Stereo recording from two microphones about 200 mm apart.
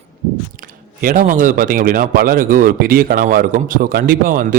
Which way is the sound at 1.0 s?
40° right (ahead or behind).